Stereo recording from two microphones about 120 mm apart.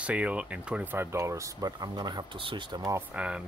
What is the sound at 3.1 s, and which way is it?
Speech, 10° right (ahead or behind).